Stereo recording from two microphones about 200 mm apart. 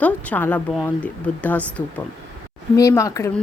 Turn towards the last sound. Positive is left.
turn(degrees=15)  # may be behind; listen again after turning